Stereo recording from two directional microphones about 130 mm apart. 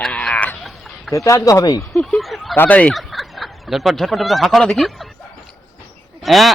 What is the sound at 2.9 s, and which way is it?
Speech, centre (ahead or behind).